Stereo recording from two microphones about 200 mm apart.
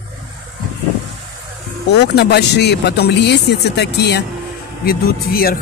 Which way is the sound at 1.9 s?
60° left (ahead or behind).